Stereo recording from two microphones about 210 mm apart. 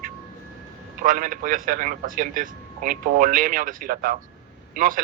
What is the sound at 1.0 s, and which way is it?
A man's voice, 40° right (ahead or behind).